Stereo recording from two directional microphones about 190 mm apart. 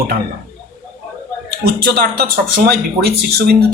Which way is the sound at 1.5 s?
55° right (ahead or behind).